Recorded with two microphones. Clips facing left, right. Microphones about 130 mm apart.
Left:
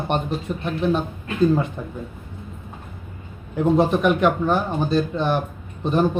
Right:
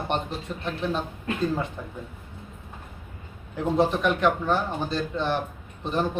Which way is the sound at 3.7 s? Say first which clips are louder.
Left 3 dB; 15° left (ahead or behind).